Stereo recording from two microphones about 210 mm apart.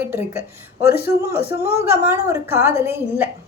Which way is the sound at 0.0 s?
10° right (ahead or behind).